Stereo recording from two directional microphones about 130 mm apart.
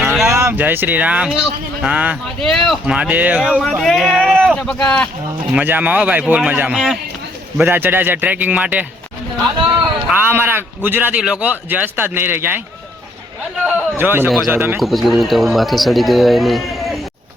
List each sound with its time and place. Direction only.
0.0 s a sound: 5° right (ahead or behind)
0.3 s speech: 20° right (ahead or behind)
2.4 s speech: 5° left (ahead or behind)
2.8 s speech: 10° right (ahead or behind)
3.6 s speech: 5° left (ahead or behind)
5.5 s speech: 15° right (ahead or behind)
10.1 s speech: 15° right (ahead or behind)
13.7 s speech: 15° right (ahead or behind)
14.3 s speech: centre (ahead or behind)
14.5 s speech: 15° right (ahead or behind)
14.8 s speech: centre (ahead or behind)